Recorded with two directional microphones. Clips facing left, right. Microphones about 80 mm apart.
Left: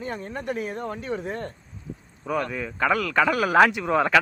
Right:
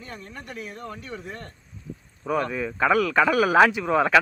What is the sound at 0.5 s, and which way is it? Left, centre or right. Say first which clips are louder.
Speech: left 5 dB; left.